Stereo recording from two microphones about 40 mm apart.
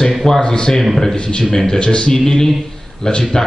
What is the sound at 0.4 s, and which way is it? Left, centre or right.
A man's voice, centre.